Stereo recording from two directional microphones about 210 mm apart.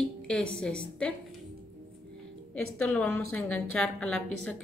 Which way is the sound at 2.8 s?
5° left (ahead or behind).